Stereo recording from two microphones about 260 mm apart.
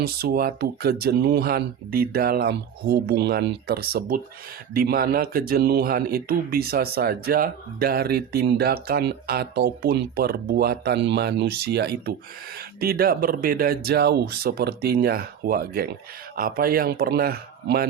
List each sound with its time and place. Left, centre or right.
0.0 s speech: right